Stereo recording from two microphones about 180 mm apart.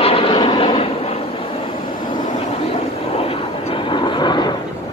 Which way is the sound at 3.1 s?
30° left (ahead or behind).